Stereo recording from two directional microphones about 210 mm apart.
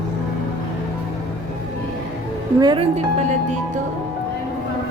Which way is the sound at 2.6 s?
20° right (ahead or behind).